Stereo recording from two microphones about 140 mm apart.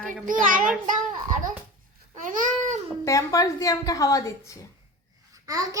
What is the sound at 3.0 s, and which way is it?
A woman's voice, 20° left (ahead or behind).